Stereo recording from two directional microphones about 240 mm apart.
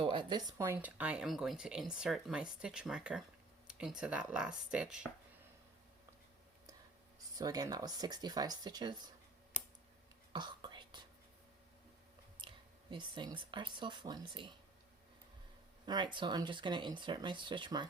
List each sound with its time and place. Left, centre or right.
0.0 s speech: centre
7.3 s speech: centre
10.3 s whispering: centre
12.4 s speech: right
15.9 s speech: centre